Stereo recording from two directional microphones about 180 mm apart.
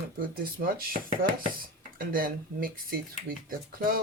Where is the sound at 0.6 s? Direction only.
55° right (ahead or behind).